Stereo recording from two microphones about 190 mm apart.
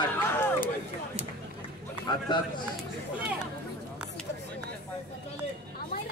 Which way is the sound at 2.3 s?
25° left (ahead or behind).